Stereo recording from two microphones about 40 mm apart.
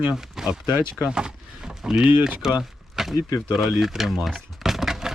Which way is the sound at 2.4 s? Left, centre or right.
Centre.